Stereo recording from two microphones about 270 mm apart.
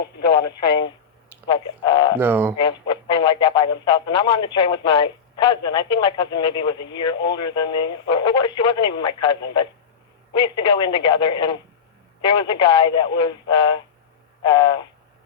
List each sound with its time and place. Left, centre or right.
1.5 s speech: centre
2.1 s speech: centre
2.6 s speech: centre